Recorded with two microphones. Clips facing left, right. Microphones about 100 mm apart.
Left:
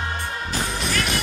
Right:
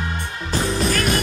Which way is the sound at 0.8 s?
45° right (ahead or behind).